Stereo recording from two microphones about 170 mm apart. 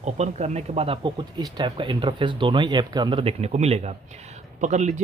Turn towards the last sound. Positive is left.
turn(degrees=-45)  # may be behind; listen again after turning